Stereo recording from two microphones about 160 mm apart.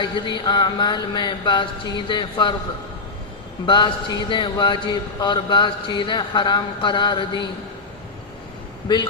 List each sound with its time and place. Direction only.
0.0 s a man's voice: 30° left (ahead or behind)
3.7 s a man's voice: 30° left (ahead or behind)